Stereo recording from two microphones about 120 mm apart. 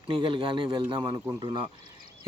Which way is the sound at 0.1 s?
45° right (ahead or behind).